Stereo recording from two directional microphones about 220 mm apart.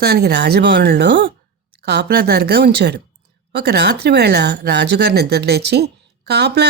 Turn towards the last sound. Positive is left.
turn(degrees=-50)  # may be behind; listen again after turning